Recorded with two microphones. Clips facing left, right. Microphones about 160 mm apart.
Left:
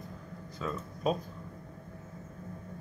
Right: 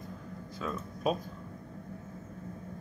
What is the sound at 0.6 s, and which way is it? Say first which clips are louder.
Speech: even; centre (ahead or behind).